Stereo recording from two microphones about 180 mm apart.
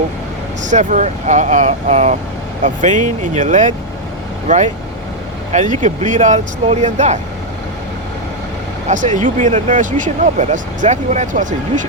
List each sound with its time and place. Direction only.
0.6 s speech: 45° right (ahead or behind)
8.9 s speech: 45° right (ahead or behind)